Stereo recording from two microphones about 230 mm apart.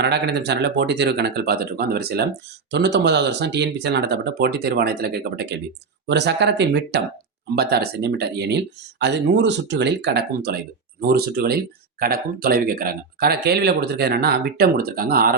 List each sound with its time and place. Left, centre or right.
0.0 s speech: right